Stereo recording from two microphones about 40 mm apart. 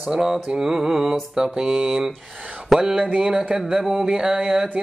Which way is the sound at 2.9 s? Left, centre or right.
Right.